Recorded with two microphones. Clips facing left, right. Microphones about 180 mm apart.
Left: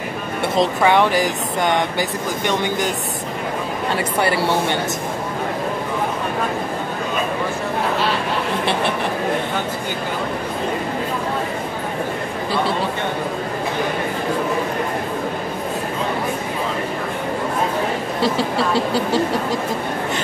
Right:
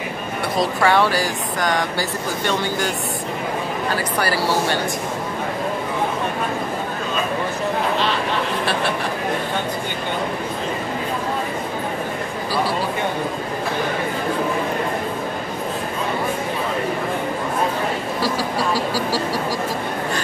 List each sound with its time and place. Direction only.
0.6 s speech: 20° left (ahead or behind)
3.9 s speech: 25° left (ahead or behind)
18.2 s speech: 25° left (ahead or behind)